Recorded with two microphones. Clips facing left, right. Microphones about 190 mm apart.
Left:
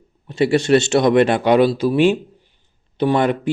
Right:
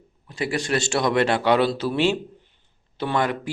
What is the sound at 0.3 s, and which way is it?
Speech, 25° left (ahead or behind).